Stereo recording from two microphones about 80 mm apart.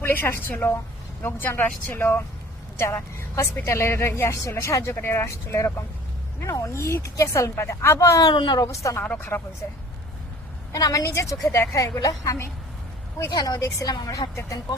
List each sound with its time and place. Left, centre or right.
0.0 s speech: left
2.7 s a woman's voice: left
8.3 s speech: left
8.6 s a woman's voice: left
9.0 s speech: left
10.7 s a woman's voice: left
11.9 s a woman's voice: left